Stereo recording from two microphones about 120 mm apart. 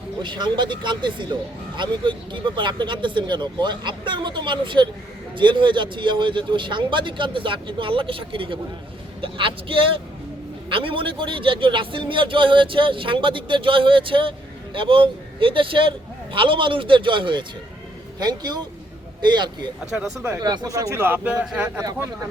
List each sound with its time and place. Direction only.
0.2 s a man's voice: 40° right (ahead or behind)
19.8 s speech: 5° right (ahead or behind)
20.4 s a man's voice: 35° right (ahead or behind); by 21.7 s 15° right (ahead or behind)
21.8 s a man's voice: 25° right (ahead or behind)